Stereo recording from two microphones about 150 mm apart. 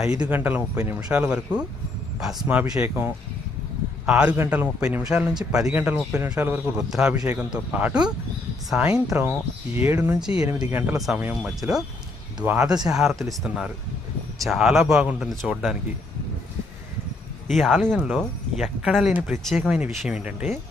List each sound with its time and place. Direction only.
0.3 s a man's voice: 15° right (ahead or behind)
10.4 s a man's voice: 20° right (ahead or behind)
10.9 s speech: centre (ahead or behind)
17.5 s speech: centre (ahead or behind)